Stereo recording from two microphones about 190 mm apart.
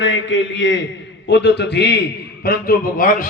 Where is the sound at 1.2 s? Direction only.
65° left (ahead or behind).